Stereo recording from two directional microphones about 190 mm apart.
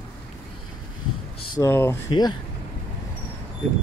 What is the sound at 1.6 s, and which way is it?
Speech, 10° left (ahead or behind).